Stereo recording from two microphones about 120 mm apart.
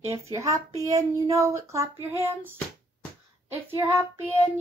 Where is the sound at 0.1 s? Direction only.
25° right (ahead or behind).